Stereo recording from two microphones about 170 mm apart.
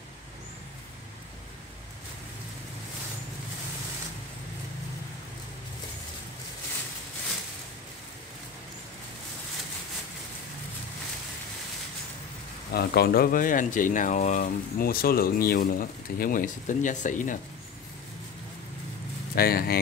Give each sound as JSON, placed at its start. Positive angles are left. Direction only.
{"t": 12.7, "sound": "speech", "side_deg": 65}
{"t": 19.3, "sound": "speech", "side_deg": 60}